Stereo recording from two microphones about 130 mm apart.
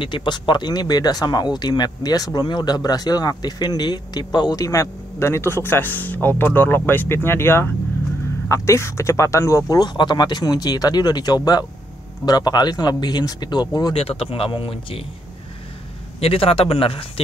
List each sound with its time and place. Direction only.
0.0 s speech: 35° left (ahead or behind)
13.9 s speech: 50° left (ahead or behind)
16.2 s speech: 45° left (ahead or behind)